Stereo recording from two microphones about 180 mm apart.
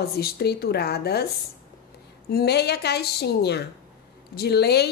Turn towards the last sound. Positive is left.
turn(degrees=65)  # may be behind; listen again after turning